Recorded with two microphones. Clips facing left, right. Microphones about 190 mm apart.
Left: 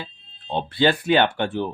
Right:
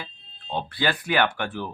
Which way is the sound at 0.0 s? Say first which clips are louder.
Left 3 dB; 25° left (ahead or behind).